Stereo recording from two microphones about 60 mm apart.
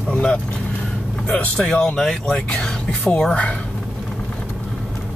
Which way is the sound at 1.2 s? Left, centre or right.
Left.